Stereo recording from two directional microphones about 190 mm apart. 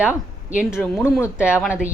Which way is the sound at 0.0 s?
5° right (ahead or behind).